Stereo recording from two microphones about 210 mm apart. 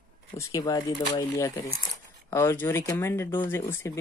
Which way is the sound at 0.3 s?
15° left (ahead or behind).